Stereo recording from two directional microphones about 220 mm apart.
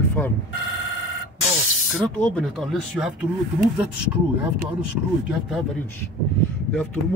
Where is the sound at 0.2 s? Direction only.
5° left (ahead or behind).